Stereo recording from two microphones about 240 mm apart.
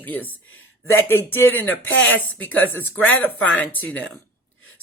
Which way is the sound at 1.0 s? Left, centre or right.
Centre.